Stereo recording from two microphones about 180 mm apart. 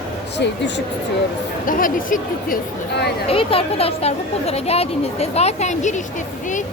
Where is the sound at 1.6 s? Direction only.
50° left (ahead or behind).